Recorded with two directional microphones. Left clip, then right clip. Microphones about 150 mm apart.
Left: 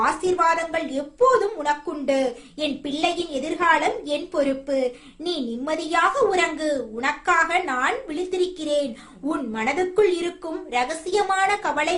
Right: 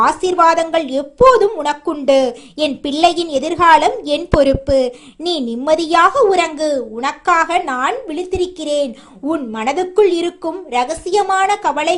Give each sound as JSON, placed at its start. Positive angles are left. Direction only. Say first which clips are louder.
{"t": 0.0, "sound": "a woman's voice", "louder": "right 8 dB", "side_deg": -50}